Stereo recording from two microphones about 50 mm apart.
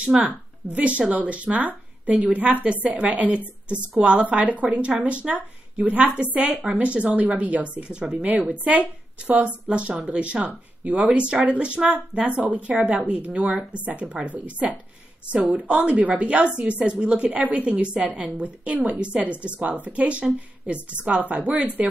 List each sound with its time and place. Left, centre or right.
0.2 s a woman's voice: right
15.4 s a woman's voice: right